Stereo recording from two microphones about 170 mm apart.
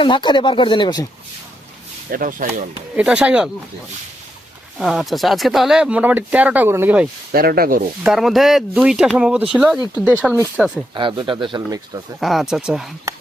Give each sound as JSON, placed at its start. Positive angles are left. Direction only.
{"t": 0.0, "sound": "speech", "side_deg": 25}
{"t": 2.0, "sound": "speech", "side_deg": -55}
{"t": 2.9, "sound": "speech", "side_deg": -5}
{"t": 4.8, "sound": "speech", "side_deg": 0}
{"t": 7.3, "sound": "speech", "side_deg": -60}
{"t": 8.0, "sound": "speech", "side_deg": 0}
{"t": 10.9, "sound": "speech", "side_deg": -30}
{"t": 12.2, "sound": "speech", "side_deg": 0}